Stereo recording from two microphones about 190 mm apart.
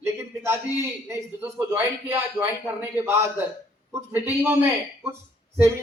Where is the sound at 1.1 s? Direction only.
10° right (ahead or behind).